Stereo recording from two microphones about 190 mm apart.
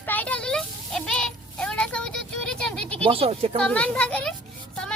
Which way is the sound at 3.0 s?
30° right (ahead or behind).